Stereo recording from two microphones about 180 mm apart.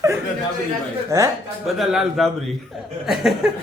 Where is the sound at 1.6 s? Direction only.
Centre (ahead or behind).